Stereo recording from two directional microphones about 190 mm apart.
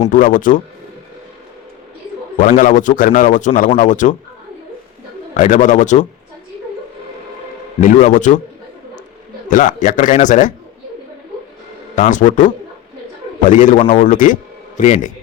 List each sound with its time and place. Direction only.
0.0 s a man's voice: 45° left (ahead or behind)
2.4 s a man's voice: 45° left (ahead or behind)
5.3 s speech: 40° left (ahead or behind)
7.8 s a man's voice: 45° left (ahead or behind)
9.5 s a man's voice: 45° left (ahead or behind)
11.9 s a man's voice: 40° left (ahead or behind)